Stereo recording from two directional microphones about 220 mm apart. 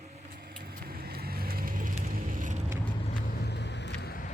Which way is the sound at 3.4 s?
50° left (ahead or behind).